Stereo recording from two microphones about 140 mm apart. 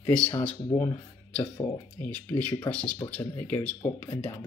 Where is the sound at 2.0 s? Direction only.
10° left (ahead or behind).